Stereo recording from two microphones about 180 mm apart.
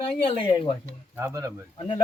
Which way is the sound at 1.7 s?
30° left (ahead or behind).